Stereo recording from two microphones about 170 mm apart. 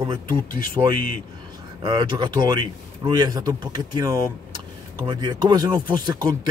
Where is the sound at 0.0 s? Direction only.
25° right (ahead or behind).